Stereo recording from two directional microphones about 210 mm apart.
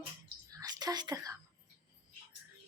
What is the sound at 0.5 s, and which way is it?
Whispering, 20° right (ahead or behind).